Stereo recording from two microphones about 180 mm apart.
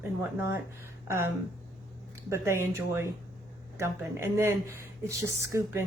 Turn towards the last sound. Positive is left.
turn(degrees=-15)  # may be behind; listen again after turning